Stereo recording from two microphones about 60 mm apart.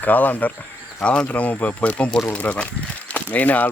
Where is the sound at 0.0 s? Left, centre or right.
Left.